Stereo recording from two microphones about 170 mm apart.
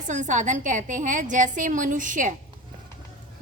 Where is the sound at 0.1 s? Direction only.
45° right (ahead or behind).